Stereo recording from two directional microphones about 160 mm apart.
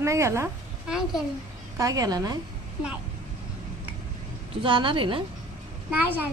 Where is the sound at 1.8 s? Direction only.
20° right (ahead or behind).